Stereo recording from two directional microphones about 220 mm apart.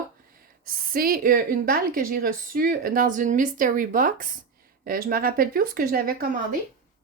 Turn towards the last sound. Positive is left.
turn(degrees=-40)  # may be behind; listen again after turning